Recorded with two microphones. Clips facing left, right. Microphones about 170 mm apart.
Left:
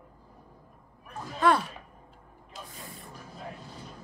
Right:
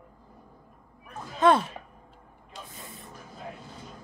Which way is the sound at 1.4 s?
20° right (ahead or behind).